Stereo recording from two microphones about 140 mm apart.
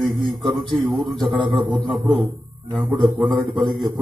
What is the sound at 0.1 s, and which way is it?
Speech, centre (ahead or behind).